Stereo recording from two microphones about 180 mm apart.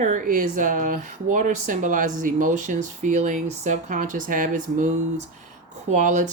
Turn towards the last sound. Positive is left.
turn(degrees=-45)  # may be behind; listen again after turning